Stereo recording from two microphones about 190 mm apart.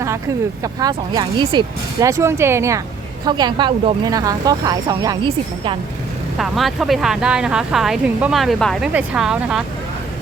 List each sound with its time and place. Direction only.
0.6 s speech: 20° right (ahead or behind)
6.3 s speech: centre (ahead or behind)